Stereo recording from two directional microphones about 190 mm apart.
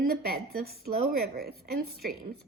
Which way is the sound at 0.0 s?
55° right (ahead or behind).